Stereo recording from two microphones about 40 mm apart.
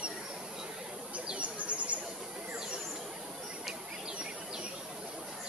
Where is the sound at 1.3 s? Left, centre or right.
Right.